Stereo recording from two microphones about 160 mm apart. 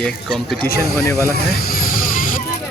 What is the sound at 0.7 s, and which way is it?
Speech, 70° left (ahead or behind).